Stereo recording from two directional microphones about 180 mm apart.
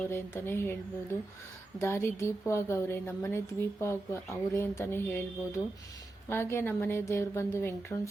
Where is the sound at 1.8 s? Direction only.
15° left (ahead or behind).